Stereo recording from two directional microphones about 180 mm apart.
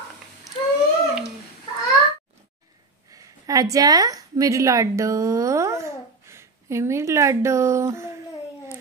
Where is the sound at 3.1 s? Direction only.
20° right (ahead or behind).